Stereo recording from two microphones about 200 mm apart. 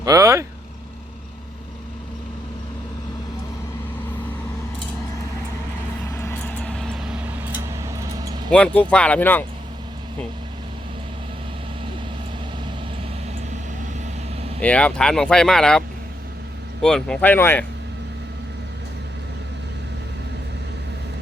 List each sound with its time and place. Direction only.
0.0 s vehicle: 15° right (ahead or behind)
6.1 s vehicle: 10° left (ahead or behind); by 7.3 s 5° right (ahead or behind)
7.7 s a sound: 15° right (ahead or behind)
8.4 s speech: 5° left (ahead or behind)
14.6 s speech: 5° left (ahead or behind)
16.8 s speech: 5° left (ahead or behind)